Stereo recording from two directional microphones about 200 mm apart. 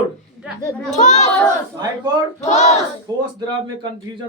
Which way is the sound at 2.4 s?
35° left (ahead or behind).